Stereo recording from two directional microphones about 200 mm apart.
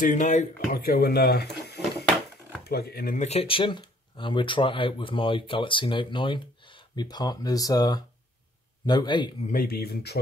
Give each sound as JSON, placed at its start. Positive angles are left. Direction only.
{"t": 0.0, "sound": "speech", "side_deg": 40}
{"t": 9.5, "sound": "speech", "side_deg": 45}